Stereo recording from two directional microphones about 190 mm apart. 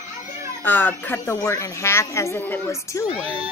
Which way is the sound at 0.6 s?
10° left (ahead or behind).